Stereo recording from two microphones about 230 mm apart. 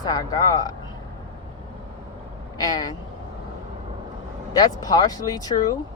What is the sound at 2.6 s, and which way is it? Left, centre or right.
Speech, centre.